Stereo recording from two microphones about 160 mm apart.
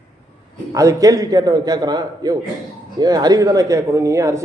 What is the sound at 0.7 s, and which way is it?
Speech, 20° right (ahead or behind).